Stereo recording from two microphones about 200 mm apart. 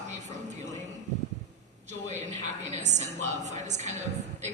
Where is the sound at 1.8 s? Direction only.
35° right (ahead or behind).